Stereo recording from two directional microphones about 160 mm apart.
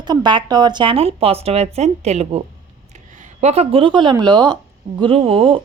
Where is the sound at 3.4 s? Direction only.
40° right (ahead or behind).